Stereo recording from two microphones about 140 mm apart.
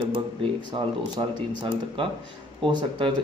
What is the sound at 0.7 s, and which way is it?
Speech, 35° right (ahead or behind).